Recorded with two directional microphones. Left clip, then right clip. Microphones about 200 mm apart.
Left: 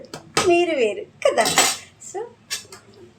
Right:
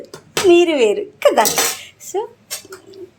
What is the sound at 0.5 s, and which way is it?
Speech, 30° right (ahead or behind).